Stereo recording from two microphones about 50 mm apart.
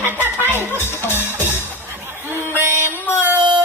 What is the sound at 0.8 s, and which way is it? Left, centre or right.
Music, left.